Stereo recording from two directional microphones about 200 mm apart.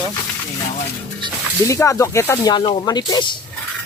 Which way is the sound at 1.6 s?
15° left (ahead or behind).